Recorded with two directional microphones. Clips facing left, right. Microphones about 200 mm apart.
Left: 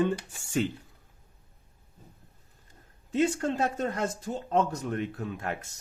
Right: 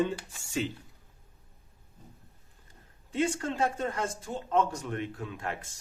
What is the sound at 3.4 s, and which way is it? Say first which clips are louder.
Speech: left 2 dB; 40° left (ahead or behind).